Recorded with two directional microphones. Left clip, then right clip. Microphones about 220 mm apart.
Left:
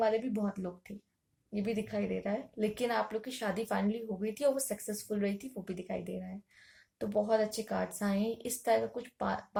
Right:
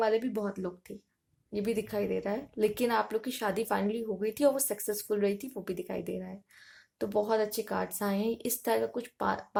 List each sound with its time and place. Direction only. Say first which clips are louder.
0.0 s speech: right 2 dB; 40° right (ahead or behind)